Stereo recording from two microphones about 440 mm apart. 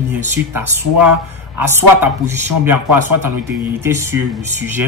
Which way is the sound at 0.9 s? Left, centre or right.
Right.